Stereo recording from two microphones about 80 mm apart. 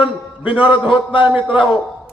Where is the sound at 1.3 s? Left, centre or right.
Right.